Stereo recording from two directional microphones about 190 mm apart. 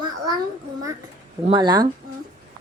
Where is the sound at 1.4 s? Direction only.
25° right (ahead or behind).